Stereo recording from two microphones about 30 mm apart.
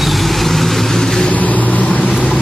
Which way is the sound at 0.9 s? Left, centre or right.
Centre.